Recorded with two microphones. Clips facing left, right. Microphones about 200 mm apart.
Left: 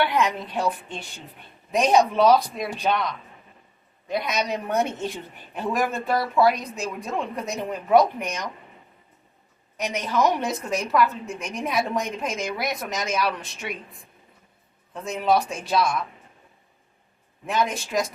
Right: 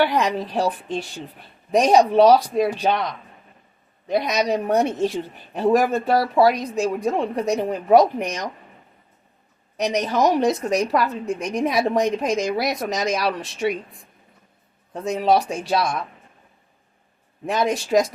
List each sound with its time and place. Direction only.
0.0 s a woman's voice: 35° right (ahead or behind)
9.7 s a woman's voice: 40° right (ahead or behind)
15.0 s a woman's voice: 35° right (ahead or behind)
17.5 s a woman's voice: 35° right (ahead or behind)